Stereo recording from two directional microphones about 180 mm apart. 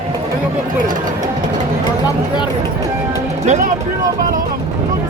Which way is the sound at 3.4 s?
40° right (ahead or behind).